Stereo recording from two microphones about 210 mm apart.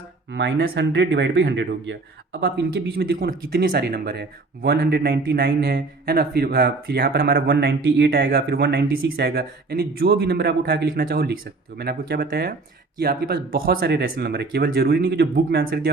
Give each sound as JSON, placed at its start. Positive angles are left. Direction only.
{"t": 0.3, "sound": "speech", "side_deg": -55}